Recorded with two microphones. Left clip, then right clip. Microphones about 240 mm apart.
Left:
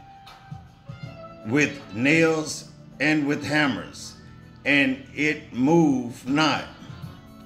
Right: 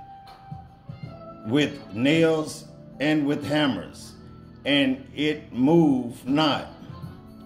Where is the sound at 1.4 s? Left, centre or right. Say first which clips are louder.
Left 1 dB; centre.